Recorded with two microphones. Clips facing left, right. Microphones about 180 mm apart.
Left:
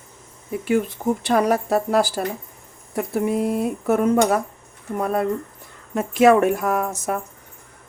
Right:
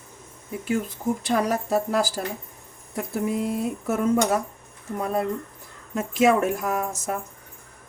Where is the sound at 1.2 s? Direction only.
60° left (ahead or behind).